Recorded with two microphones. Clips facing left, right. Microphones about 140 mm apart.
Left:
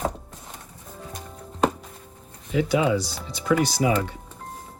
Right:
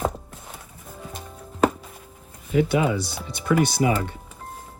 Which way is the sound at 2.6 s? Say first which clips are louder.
Left 1 dB; 55° right (ahead or behind).